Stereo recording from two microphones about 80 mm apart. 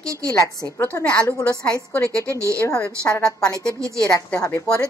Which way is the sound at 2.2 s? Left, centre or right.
Right.